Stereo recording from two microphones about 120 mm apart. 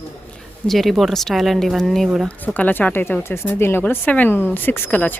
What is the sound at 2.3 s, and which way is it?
Speech, 15° left (ahead or behind).